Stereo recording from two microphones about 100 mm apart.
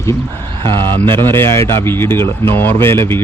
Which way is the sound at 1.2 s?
25° left (ahead or behind).